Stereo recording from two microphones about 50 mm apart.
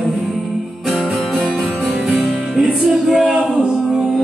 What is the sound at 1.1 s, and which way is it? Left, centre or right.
Music, centre.